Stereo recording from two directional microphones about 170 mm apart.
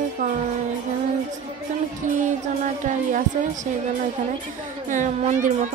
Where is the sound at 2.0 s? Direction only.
50° right (ahead or behind).